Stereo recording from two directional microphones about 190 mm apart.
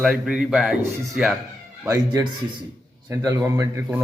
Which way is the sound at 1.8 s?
15° right (ahead or behind).